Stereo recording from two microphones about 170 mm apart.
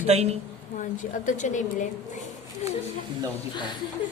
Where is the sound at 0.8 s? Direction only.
45° left (ahead or behind).